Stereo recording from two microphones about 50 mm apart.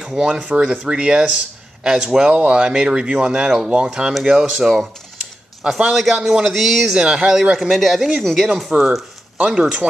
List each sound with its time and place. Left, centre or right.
0.0 s speech: centre
0.3 s speech: right; by 8.2 s centre
8.2 s speech: centre
8.7 s speech: right